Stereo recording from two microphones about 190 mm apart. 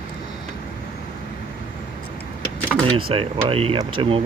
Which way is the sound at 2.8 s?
30° right (ahead or behind).